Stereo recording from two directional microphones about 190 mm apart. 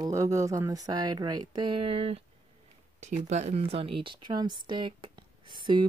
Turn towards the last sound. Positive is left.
turn(degrees=-25)  # may be behind; listen again after turning